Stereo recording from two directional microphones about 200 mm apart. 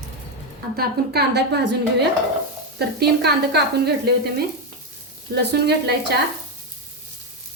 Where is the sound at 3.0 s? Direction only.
55° right (ahead or behind).